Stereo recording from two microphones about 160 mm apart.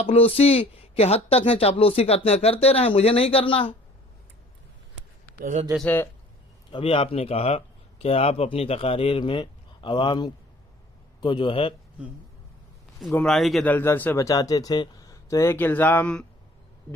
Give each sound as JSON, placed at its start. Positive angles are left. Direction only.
{"t": 0.0, "sound": "speech", "side_deg": 35}
{"t": 5.4, "sound": "speech", "side_deg": -55}
{"t": 6.7, "sound": "speech", "side_deg": 35}
{"t": 13.0, "sound": "speech", "side_deg": 0}
{"t": 13.7, "sound": "speech", "side_deg": 15}